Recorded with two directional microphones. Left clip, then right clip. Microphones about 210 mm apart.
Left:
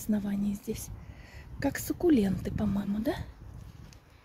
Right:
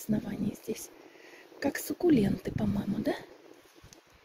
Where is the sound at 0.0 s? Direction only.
5° left (ahead or behind).